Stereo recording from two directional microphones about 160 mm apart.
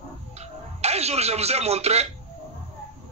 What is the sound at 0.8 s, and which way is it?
A man's voice, 40° right (ahead or behind).